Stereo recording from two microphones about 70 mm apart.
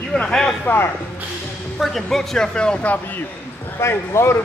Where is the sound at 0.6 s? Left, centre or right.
Left.